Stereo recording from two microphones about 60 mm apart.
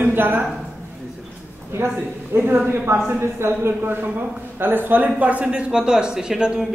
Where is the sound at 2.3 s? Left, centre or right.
Right.